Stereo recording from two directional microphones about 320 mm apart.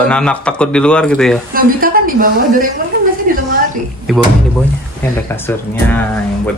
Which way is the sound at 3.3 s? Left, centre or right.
Right.